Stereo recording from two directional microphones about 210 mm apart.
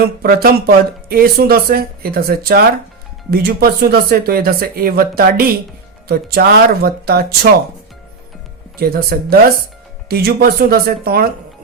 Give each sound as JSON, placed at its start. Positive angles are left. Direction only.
{"t": 0.2, "sound": "speech", "side_deg": -45}
{"t": 8.8, "sound": "speech", "side_deg": -45}